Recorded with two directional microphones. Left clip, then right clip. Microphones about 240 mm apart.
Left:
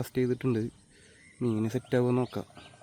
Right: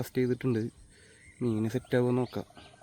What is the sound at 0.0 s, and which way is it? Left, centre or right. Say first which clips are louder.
Speech: left 1 dB; centre.